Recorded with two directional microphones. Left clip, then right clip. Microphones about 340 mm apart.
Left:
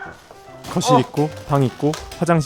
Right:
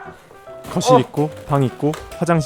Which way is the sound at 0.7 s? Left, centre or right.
Centre.